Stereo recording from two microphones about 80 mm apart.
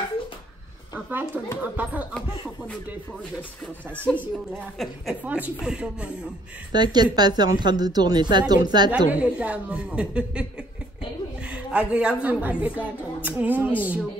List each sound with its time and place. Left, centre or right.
0.9 s speech: right
3.9 s speech: centre
5.2 s a woman's voice: centre
6.7 s a woman's voice: right
8.9 s a woman's voice: centre
11.5 s a woman's voice: centre